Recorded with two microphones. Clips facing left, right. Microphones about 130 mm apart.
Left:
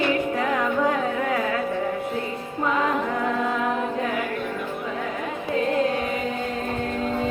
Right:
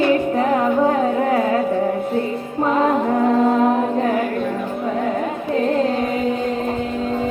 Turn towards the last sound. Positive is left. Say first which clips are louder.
# right 4 dB
turn(degrees=-35)  # may be behind; listen again after turning